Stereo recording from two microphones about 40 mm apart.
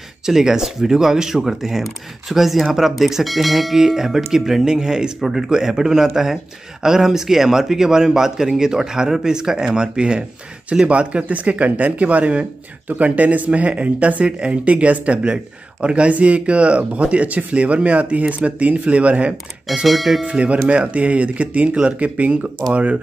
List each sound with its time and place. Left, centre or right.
0.3 s speech: centre; by 19.3 s right
19.9 s speech: centre
20.2 s speech: right